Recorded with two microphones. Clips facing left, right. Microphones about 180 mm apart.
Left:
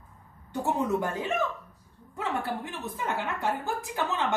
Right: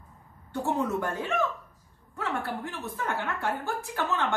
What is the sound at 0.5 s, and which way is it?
A woman's voice, 20° left (ahead or behind).